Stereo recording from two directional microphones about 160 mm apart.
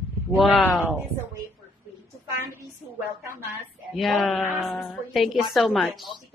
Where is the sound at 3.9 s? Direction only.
Centre (ahead or behind).